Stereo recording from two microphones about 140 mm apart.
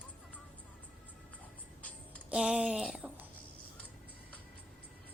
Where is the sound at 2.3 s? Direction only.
5° right (ahead or behind).